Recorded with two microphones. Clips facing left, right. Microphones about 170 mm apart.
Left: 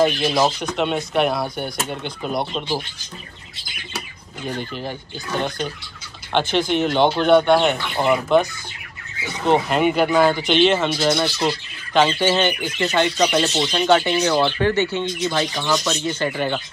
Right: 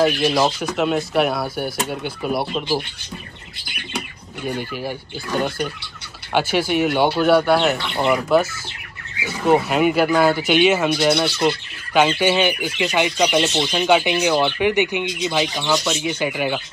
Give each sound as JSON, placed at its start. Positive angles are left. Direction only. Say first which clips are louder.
{"t": 0.0, "sound": "speech", "louder": "right 1 dB", "side_deg": -5}
{"t": 4.5, "sound": "speech", "louder": "right 2 dB", "side_deg": -10}
{"t": 6.3, "sound": "speech", "louder": "even", "side_deg": -10}
{"t": 11.9, "sound": "speech", "louder": "right 1 dB", "side_deg": -10}